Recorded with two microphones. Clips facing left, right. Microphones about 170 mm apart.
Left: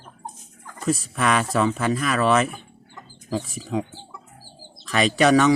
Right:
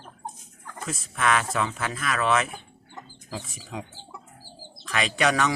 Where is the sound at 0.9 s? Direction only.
40° left (ahead or behind).